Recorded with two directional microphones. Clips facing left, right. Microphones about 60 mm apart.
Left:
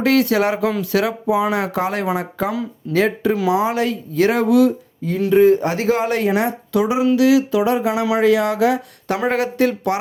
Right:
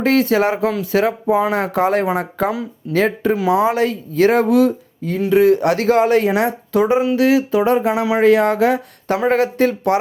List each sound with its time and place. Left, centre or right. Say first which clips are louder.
0.0 s speech: right 1 dB; right
5.3 s speech: even; right